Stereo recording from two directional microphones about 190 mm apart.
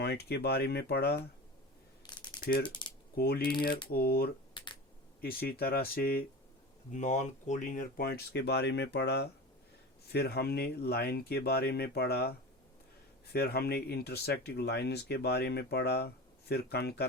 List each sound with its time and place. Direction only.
0.0 s speech: 60° left (ahead or behind)
2.0 s rattle: 25° left (ahead or behind)
2.8 s a sound: 25° left (ahead or behind)
3.2 s speech: 55° left (ahead or behind)
4.5 s computer keyboard: 25° left (ahead or behind)
5.2 s speech: 55° left (ahead or behind)
6.9 s speech: 40° left (ahead or behind); by 12.3 s 55° left (ahead or behind)
13.3 s speech: 55° left (ahead or behind)